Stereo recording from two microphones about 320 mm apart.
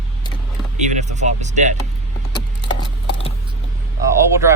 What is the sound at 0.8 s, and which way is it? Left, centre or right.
Speech, right.